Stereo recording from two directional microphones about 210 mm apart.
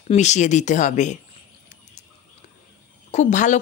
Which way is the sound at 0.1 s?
35° left (ahead or behind).